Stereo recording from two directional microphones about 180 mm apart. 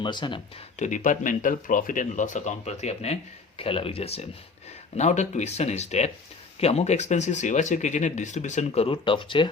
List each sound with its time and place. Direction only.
0.0 s speech: 25° left (ahead or behind)
0.8 s speech: 45° left (ahead or behind); by 9.5 s 25° left (ahead or behind)